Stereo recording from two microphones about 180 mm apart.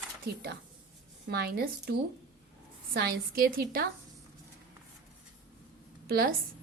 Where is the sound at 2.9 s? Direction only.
55° right (ahead or behind).